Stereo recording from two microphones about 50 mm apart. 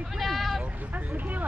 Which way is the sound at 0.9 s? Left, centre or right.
Right.